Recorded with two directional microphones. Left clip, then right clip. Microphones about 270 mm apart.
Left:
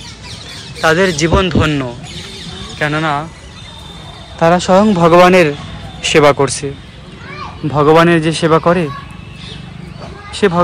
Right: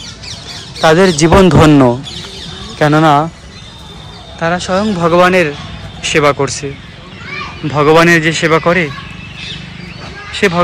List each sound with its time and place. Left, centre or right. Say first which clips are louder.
0.7 s speech: right 3 dB; centre
4.4 s speech: left 4 dB; centre
7.7 s speech: right 1 dB; centre
10.4 s speech: right 1 dB; centre